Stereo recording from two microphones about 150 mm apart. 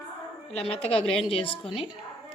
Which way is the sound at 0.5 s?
40° left (ahead or behind).